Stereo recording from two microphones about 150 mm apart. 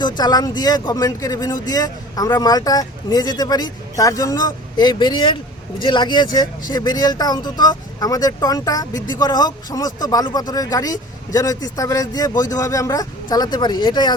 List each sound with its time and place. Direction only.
0.2 s speech: 25° left (ahead or behind)